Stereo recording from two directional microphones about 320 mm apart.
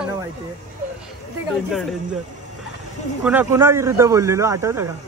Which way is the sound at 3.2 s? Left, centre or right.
Centre.